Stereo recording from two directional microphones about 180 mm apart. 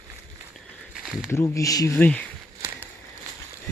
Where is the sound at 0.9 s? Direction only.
Centre (ahead or behind).